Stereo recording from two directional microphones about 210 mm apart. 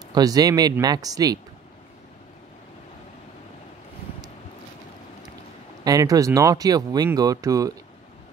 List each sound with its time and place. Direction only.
0.1 s speech: 20° right (ahead or behind)
5.9 s speech: 15° right (ahead or behind)